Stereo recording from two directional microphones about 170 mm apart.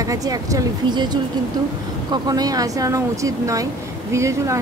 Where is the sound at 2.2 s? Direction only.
20° right (ahead or behind).